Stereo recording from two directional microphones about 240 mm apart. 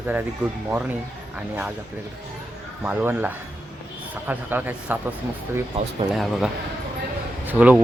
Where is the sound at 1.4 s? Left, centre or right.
Centre.